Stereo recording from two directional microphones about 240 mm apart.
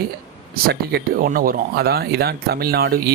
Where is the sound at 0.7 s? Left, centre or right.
Right.